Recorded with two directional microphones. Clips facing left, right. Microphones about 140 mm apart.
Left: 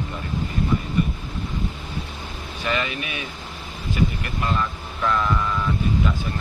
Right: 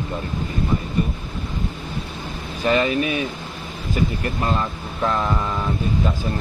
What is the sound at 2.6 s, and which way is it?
Speech, 35° right (ahead or behind).